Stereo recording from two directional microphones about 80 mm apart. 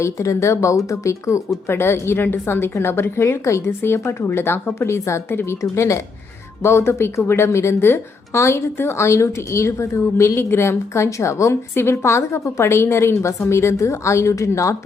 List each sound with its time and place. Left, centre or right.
0.0 s speech: left